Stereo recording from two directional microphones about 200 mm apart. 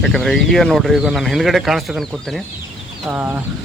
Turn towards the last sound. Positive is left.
turn(degrees=-10)  # may be behind; listen again after turning